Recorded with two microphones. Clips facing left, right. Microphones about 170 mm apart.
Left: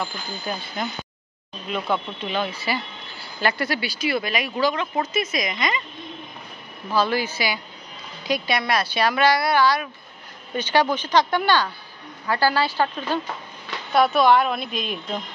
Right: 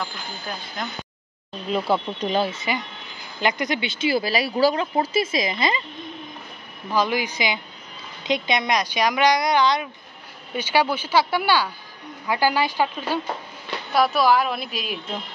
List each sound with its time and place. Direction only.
0.0 s a woman's voice: 5° left (ahead or behind)
2.1 s speech: 40° right (ahead or behind)
2.5 s speech: 20° right (ahead or behind)
6.9 s a woman's voice: 15° right (ahead or behind)